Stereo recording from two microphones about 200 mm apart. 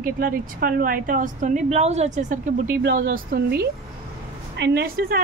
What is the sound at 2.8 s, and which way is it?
A woman's voice, 50° right (ahead or behind).